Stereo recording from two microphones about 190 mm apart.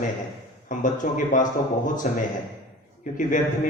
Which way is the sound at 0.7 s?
40° left (ahead or behind).